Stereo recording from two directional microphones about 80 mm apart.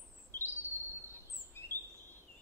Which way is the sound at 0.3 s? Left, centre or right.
Left.